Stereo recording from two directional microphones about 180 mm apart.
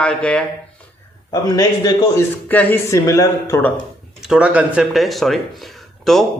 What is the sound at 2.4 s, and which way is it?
Speech, 10° left (ahead or behind).